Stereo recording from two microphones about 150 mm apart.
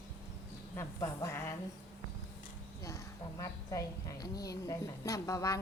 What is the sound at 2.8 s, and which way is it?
A woman's voice, 20° left (ahead or behind).